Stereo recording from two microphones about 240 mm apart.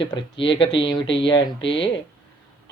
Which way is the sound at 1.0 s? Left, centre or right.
Left.